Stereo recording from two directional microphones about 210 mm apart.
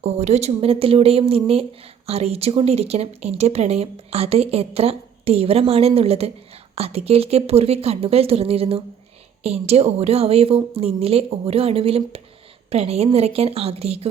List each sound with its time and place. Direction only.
0.0 s speech: 30° right (ahead or behind)